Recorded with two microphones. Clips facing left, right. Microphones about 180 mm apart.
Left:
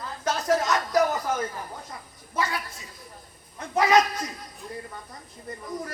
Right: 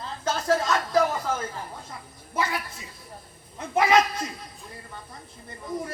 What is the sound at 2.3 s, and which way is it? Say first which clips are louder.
Speech: right 1 dB; 25° right (ahead or behind).